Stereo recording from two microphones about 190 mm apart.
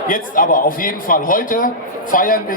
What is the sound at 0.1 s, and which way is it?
A man's voice, 45° left (ahead or behind).